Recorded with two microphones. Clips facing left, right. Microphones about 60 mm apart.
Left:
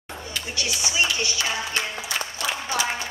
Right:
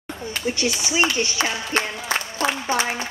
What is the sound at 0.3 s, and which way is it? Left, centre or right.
Speech, right.